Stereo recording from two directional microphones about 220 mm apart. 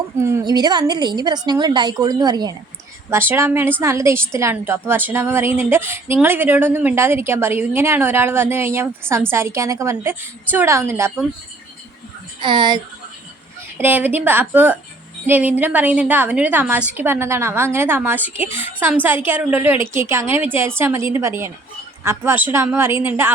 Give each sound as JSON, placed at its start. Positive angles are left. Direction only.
{"t": 0.2, "sound": "a woman's voice", "side_deg": -15}
{"t": 12.4, "sound": "a woman's voice", "side_deg": -20}
{"t": 13.7, "sound": "speech", "side_deg": -10}